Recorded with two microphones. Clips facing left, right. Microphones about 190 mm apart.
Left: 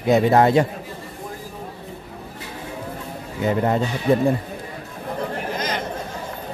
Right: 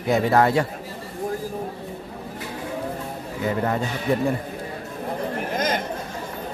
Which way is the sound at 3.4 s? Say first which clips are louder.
Left 4 dB; 25° left (ahead or behind).